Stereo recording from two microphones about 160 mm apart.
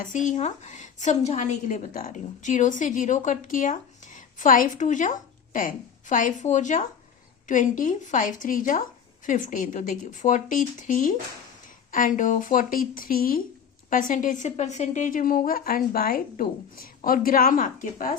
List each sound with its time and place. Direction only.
0.0 s a woman's voice: 50° left (ahead or behind)